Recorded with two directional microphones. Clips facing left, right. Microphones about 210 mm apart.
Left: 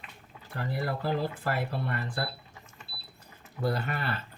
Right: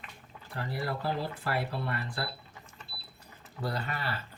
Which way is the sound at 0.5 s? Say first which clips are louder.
Left 2 dB; 50° left (ahead or behind).